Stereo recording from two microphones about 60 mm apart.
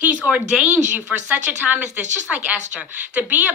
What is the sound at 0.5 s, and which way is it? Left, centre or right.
A woman's voice, centre.